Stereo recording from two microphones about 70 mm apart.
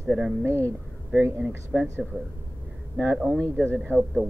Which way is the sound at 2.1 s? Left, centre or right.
Right.